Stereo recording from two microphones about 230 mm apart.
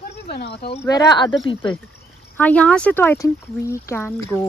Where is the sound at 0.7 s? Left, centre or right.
Centre.